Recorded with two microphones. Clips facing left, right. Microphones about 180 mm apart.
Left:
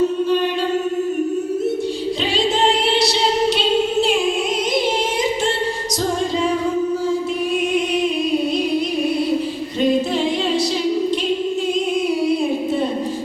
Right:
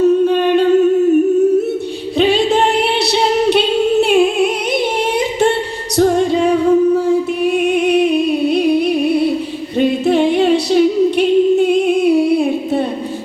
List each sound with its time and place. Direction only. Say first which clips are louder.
0.3 s humming: right 6 dB; 55° right (ahead or behind)
2.1 s singing: right 10 dB; 60° right (ahead or behind)
6.0 s singing: right 9 dB; 60° right (ahead or behind)
6.9 s music: right 6 dB; 65° right (ahead or behind)
9.8 s singing: right 4 dB; 60° right (ahead or behind)